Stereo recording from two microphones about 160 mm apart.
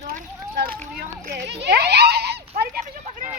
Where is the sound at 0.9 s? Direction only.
80° right.